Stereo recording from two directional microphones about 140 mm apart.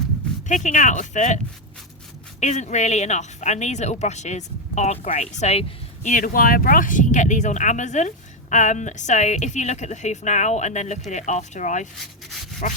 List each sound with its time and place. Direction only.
0.4 s speech: 60° left (ahead or behind)
2.4 s speech: 55° left (ahead or behind)